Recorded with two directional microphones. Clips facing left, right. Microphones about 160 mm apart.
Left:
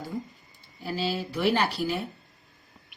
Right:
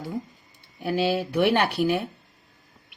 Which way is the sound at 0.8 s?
65° right (ahead or behind).